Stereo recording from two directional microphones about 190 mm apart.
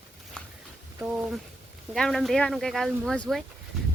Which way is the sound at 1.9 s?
Centre (ahead or behind).